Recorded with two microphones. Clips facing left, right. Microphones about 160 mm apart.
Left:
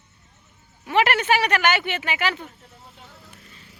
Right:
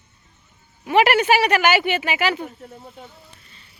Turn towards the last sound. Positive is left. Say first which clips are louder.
# left 2 dB
turn(degrees=90)